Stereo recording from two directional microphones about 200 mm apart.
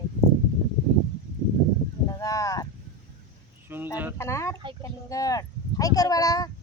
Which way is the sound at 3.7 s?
10° right (ahead or behind).